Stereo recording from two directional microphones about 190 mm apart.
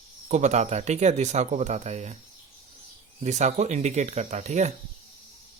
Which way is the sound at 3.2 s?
35° right (ahead or behind).